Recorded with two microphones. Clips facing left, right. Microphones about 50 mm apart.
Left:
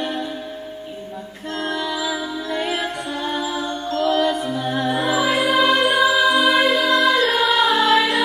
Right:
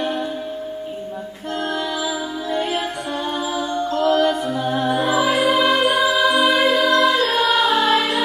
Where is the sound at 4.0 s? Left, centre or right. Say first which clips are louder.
Right 1 dB; right.